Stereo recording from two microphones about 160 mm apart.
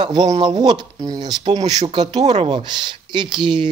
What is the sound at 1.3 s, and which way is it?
Speech, 40° right (ahead or behind).